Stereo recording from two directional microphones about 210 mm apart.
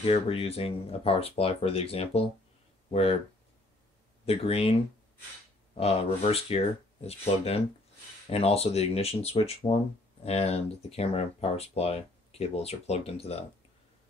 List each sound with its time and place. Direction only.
0.0 s speech: 25° left (ahead or behind)
4.3 s speech: 25° left (ahead or behind)
5.8 s speech: 30° left (ahead or behind)